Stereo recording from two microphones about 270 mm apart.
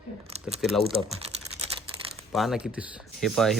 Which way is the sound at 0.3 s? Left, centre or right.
Right.